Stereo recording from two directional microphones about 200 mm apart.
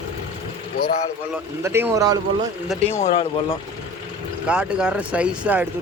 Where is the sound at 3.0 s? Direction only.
30° left (ahead or behind).